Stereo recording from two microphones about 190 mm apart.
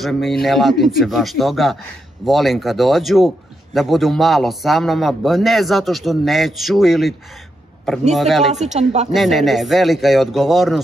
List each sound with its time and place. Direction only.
0.0 s a man's voice: centre (ahead or behind)
8.5 s speech: 35° right (ahead or behind)
9.1 s a man's voice: centre (ahead or behind)